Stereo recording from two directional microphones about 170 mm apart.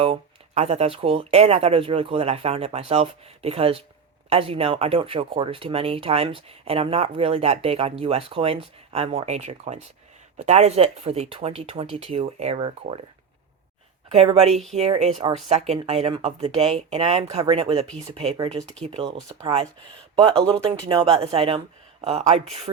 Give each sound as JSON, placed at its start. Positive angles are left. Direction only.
{"t": 0.0, "sound": "speech", "side_deg": -35}
{"t": 14.1, "sound": "speech", "side_deg": -40}
{"t": 20.2, "sound": "speech", "side_deg": -30}